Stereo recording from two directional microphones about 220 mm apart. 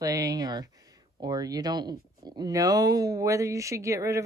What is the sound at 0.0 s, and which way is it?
Speech, 15° right (ahead or behind).